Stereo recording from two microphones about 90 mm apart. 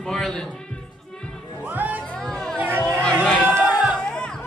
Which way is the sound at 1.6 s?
20° right (ahead or behind).